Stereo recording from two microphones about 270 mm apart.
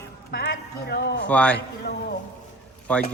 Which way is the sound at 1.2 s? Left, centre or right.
Centre.